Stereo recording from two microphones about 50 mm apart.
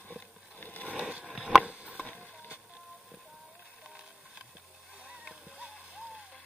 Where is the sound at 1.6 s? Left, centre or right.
Right.